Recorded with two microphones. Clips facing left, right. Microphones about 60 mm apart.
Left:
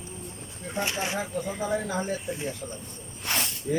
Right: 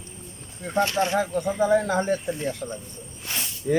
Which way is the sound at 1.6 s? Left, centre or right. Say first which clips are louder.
Right 9 dB; right.